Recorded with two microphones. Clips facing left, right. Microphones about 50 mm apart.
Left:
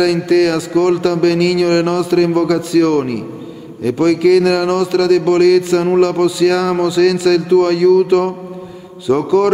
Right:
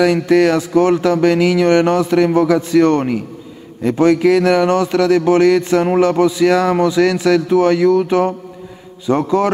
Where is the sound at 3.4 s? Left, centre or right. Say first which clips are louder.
Left 5 dB; centre.